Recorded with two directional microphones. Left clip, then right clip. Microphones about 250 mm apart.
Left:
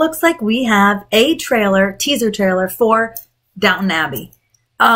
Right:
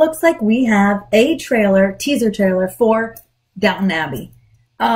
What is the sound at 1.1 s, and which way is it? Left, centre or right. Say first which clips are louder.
Speech: left 1 dB; left.